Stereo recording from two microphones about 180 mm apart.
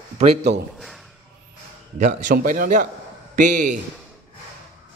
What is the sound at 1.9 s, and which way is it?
A man's voice, 45° right (ahead or behind).